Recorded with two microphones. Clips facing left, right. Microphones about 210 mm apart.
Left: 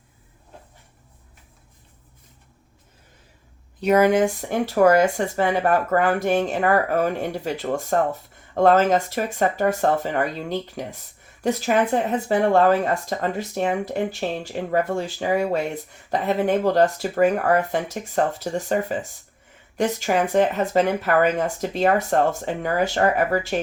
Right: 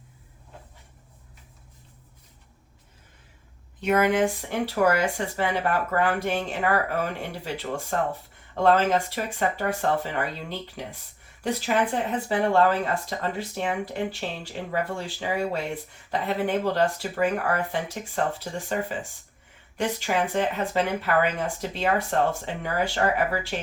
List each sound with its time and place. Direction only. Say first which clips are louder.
3.8 s speech: left 5 dB; 40° left (ahead or behind)